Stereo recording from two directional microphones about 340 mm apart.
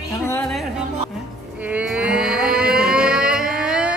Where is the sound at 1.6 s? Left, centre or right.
Centre.